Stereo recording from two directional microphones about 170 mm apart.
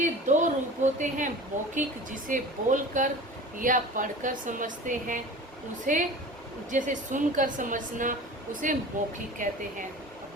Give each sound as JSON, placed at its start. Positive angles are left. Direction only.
{"t": 0.0, "sound": "a woman's voice", "side_deg": -45}